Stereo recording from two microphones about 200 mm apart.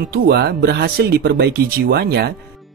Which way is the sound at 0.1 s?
55° right (ahead or behind).